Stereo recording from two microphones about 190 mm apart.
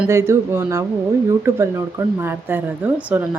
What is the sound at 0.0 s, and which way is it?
Speech, 15° right (ahead or behind).